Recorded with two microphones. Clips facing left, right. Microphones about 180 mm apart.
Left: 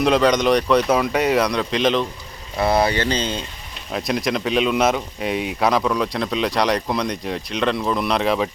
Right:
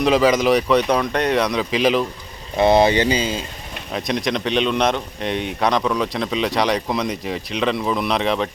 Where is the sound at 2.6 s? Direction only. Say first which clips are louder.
Right 4 dB; 20° right (ahead or behind).